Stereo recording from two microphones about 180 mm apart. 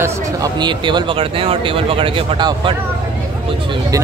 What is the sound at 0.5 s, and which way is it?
Speech, 25° right (ahead or behind).